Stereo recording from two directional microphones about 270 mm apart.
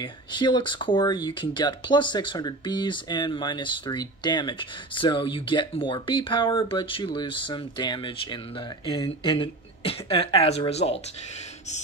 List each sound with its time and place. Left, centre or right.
0.0 s speech: centre